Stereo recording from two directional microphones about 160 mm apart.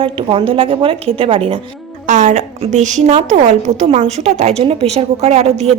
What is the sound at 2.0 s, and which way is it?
A woman's voice, 50° right (ahead or behind).